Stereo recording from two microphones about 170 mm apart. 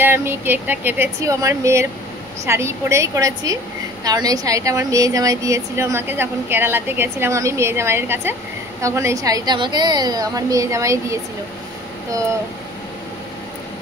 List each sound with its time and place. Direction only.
0.0 s a woman's voice: 15° right (ahead or behind)